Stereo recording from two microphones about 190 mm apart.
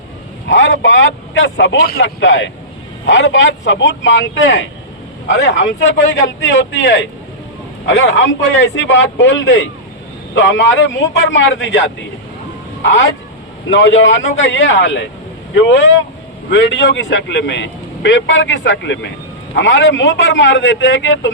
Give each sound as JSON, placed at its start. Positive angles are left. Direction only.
{"t": 0.4, "sound": "a man's voice", "side_deg": 75}
{"t": 2.0, "sound": "a man's voice", "side_deg": 80}
{"t": 13.7, "sound": "a man's voice", "side_deg": 75}